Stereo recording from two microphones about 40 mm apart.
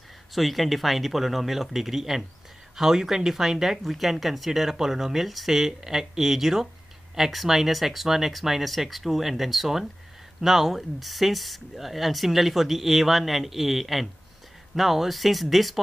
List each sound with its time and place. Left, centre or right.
0.3 s speech: centre